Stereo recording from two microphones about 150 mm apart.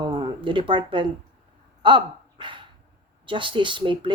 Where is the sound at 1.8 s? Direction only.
35° right (ahead or behind).